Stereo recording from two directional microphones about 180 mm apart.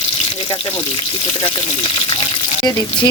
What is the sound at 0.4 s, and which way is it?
Speech, 25° left (ahead or behind).